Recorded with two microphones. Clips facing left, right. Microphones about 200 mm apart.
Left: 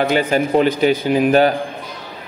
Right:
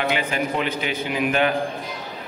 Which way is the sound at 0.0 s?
40° left (ahead or behind).